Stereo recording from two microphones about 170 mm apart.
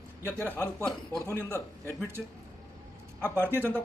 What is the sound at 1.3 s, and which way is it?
Speech, 15° left (ahead or behind).